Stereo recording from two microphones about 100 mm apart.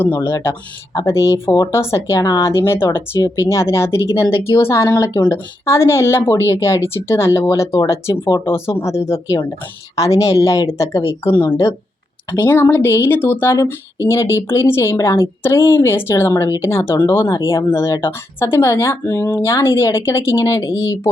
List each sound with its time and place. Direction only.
0.0 s speech: 20° left (ahead or behind)
0.9 s speech: 30° left (ahead or behind)